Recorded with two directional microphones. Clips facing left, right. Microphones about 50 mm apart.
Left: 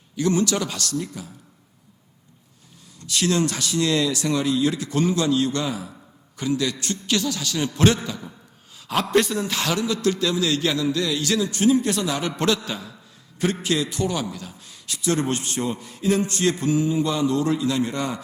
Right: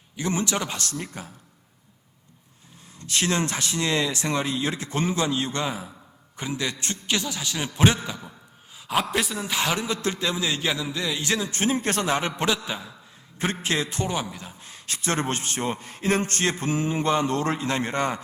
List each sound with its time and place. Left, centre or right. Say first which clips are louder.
0.2 s a man's voice: left 5 dB; right
3.1 s a man's voice: left 3 dB; right
12.4 s a man's voice: left 3 dB; centre
13.4 s a man's voice: left 3 dB; right